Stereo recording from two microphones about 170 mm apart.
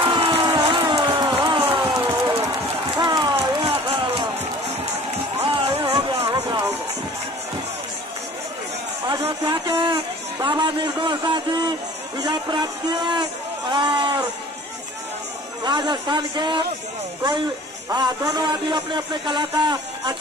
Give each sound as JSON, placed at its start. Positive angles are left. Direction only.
{"t": 0.0, "sound": "music", "side_deg": -30}
{"t": 2.0, "sound": "a sound", "side_deg": -20}
{"t": 3.0, "sound": "run", "side_deg": -25}
{"t": 5.4, "sound": "music", "side_deg": -30}
{"t": 9.2, "sound": "music", "side_deg": -30}
{"t": 9.8, "sound": "a man's voice", "side_deg": -30}
{"t": 15.6, "sound": "speech", "side_deg": -25}
{"t": 17.8, "sound": "speech", "side_deg": -25}